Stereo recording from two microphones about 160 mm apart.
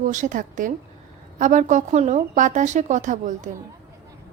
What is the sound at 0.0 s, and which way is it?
A woman's voice, 50° right (ahead or behind).